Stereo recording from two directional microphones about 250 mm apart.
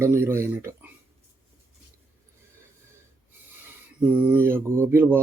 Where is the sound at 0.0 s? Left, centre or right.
Centre.